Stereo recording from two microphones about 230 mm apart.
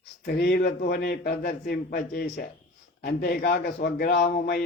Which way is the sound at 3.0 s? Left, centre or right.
Left.